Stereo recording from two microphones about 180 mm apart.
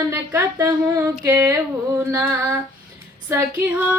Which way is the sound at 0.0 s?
15° right (ahead or behind).